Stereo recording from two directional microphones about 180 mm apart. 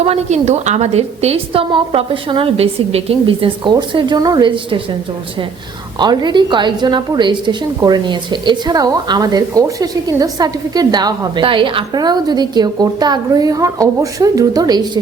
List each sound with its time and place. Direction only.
0.0 s a woman's voice: 35° right (ahead or behind)
6.0 s a woman's voice: 25° right (ahead or behind)